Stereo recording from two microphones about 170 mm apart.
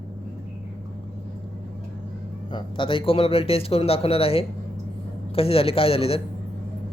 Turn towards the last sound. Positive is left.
turn(degrees=35)  # may be behind; listen again after turning